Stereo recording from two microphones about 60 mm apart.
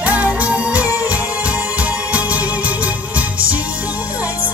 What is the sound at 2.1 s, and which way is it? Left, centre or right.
Music, right.